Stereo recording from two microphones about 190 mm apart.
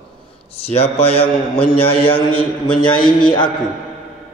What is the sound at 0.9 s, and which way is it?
A man's voice, 30° left (ahead or behind).